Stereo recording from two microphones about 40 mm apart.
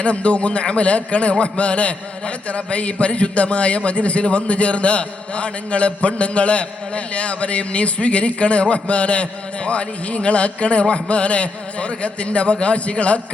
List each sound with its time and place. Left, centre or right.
0.0 s a man's voice: left